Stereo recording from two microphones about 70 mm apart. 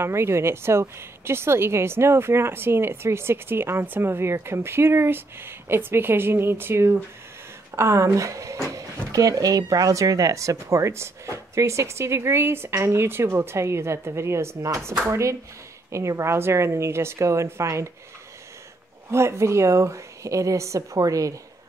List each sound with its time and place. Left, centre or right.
0.0 s a woman's voice: right
19.0 s speech: right